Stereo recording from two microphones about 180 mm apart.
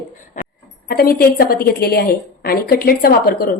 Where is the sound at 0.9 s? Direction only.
60° left (ahead or behind).